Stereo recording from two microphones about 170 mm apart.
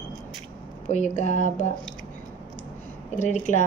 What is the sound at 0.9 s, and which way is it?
Speech, 45° left (ahead or behind).